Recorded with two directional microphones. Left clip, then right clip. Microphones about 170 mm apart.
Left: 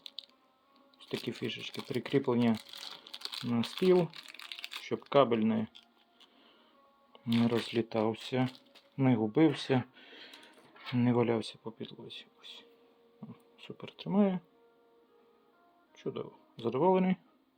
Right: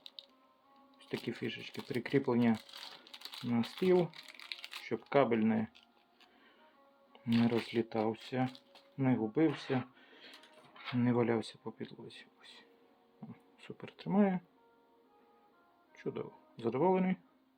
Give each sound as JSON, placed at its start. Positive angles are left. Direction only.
{"t": 0.2, "sound": "music", "side_deg": 30}
{"t": 1.0, "sound": "speech", "side_deg": 20}
{"t": 7.1, "sound": "speech", "side_deg": 15}
{"t": 9.0, "sound": "speech", "side_deg": 45}
{"t": 10.9, "sound": "speech", "side_deg": 25}
{"t": 13.2, "sound": "a sound", "side_deg": 10}
{"t": 13.6, "sound": "speech", "side_deg": 10}
{"t": 16.0, "sound": "speech", "side_deg": 10}